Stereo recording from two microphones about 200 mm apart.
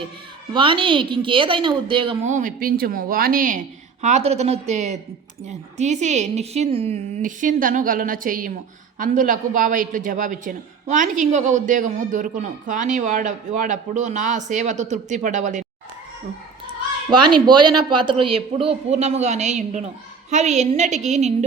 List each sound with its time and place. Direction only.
0.5 s speech: 25° right (ahead or behind)
2.3 s a man's voice: 45° right (ahead or behind)
17.1 s a man's voice: 25° right (ahead or behind)